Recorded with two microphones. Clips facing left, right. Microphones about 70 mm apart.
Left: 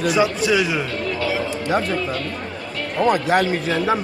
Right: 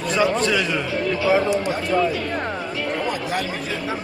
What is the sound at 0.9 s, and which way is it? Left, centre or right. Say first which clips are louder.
Speech: right 3 dB; centre.